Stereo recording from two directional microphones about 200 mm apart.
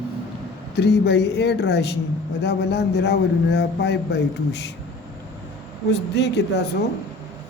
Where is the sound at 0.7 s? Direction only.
55° left (ahead or behind).